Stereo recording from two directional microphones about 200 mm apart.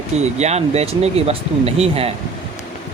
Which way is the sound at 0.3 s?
35° right (ahead or behind).